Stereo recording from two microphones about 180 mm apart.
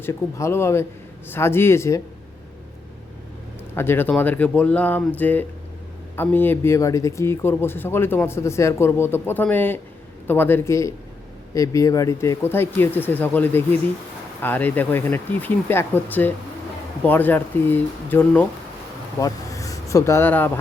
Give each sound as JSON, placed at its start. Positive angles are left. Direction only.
{"t": 0.0, "sound": "speech", "side_deg": 15}
{"t": 3.8, "sound": "speech", "side_deg": 10}